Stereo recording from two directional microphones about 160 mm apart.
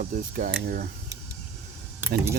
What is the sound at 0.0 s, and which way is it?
Speech, 55° right (ahead or behind).